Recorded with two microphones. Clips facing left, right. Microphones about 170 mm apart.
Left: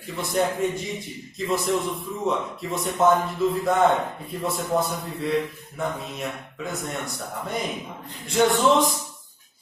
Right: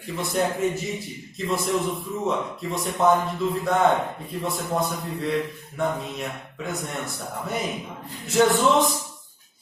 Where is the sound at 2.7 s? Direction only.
Centre (ahead or behind).